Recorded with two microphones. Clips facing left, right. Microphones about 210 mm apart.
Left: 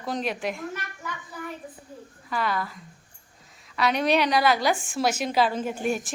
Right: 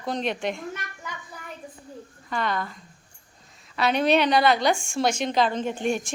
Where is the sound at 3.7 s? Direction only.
30° right (ahead or behind).